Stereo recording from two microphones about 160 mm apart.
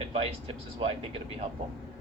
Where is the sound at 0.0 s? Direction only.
35° right (ahead or behind).